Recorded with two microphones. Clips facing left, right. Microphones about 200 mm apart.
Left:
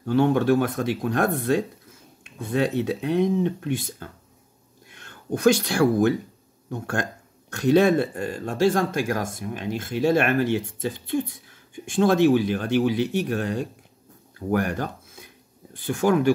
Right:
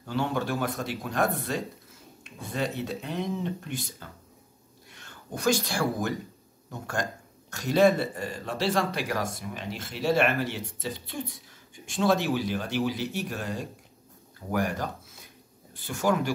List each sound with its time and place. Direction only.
0.0 s speech: 55° left (ahead or behind)
2.5 s speech: 60° left (ahead or behind)
4.9 s speech: 55° left (ahead or behind)